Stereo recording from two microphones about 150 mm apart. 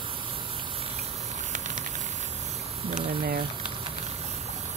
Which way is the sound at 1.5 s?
55° right (ahead or behind).